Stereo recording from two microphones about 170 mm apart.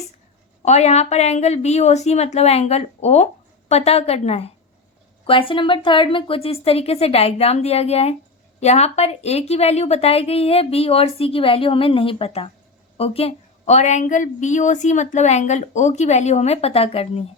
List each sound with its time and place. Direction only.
0.6 s a woman's voice: 40° left (ahead or behind)